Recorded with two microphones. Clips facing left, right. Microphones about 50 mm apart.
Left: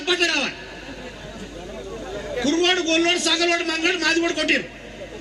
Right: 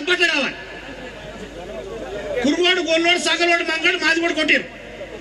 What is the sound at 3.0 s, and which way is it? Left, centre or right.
A man's voice, right.